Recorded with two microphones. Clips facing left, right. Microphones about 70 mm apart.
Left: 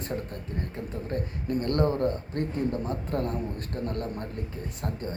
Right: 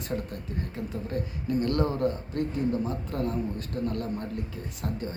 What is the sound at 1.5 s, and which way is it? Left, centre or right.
Speech, left.